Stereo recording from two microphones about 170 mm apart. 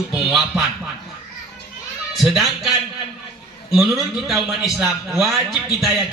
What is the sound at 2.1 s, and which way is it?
A man's voice, centre (ahead or behind).